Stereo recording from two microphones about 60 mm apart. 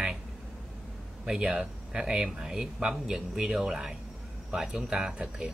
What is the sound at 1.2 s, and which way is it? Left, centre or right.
Speech, centre.